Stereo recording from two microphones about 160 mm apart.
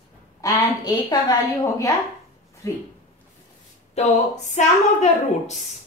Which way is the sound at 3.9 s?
45° left (ahead or behind).